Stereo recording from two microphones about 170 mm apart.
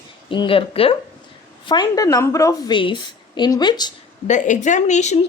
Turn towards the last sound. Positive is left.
turn(degrees=40)  # may be behind; listen again after turning